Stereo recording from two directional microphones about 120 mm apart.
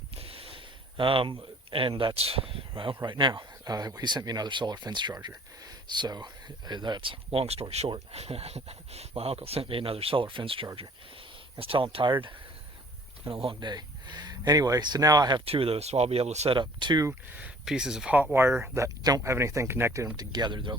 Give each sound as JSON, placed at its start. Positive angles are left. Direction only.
{"t": 0.2, "sound": "a sound", "side_deg": -50}
{"t": 2.1, "sound": "speech", "side_deg": -55}
{"t": 15.4, "sound": "speech", "side_deg": -55}
{"t": 16.6, "sound": "speech", "side_deg": -40}
{"t": 17.3, "sound": "speech", "side_deg": -10}
{"t": 20.1, "sound": "speech", "side_deg": -35}